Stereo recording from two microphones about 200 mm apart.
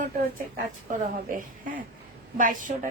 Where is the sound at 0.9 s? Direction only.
45° right (ahead or behind).